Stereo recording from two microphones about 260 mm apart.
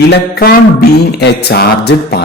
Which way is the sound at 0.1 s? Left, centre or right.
Left.